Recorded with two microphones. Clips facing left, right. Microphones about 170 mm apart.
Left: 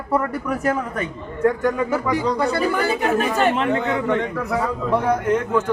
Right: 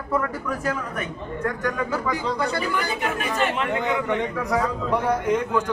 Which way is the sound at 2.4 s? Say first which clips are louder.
Left 5 dB; 35° left (ahead or behind).